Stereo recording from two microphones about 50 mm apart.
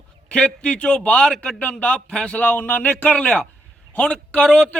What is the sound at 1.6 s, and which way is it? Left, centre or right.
A man's voice, left.